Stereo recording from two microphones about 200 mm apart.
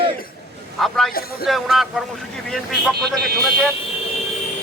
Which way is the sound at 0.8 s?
Centre (ahead or behind).